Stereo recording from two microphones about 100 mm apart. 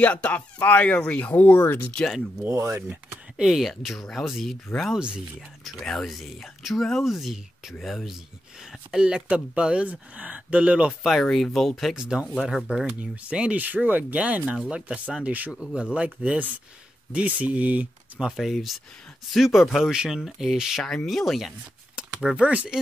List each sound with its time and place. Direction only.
0.0 s speech: 15° left (ahead or behind)
2.4 s speech: 25° right (ahead or behind)
2.9 s speech: 5° right (ahead or behind)
11.0 s speech: centre (ahead or behind); by 18.3 s 15° right (ahead or behind)
18.3 s speech: centre (ahead or behind)
21.9 s speech: 10° right (ahead or behind)